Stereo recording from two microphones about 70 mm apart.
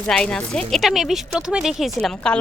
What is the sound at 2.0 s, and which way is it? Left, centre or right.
Speech, centre.